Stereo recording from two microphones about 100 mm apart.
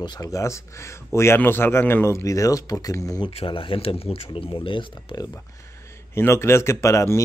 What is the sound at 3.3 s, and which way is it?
Speech, 70° left (ahead or behind).